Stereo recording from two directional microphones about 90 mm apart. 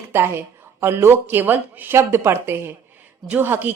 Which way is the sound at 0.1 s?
30° right (ahead or behind).